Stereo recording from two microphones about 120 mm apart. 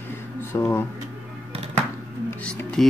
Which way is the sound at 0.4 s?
20° left (ahead or behind).